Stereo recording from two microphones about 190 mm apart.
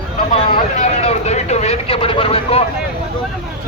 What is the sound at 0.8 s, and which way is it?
Vehicle, 35° left (ahead or behind).